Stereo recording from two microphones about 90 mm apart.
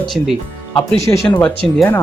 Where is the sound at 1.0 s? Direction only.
35° left (ahead or behind).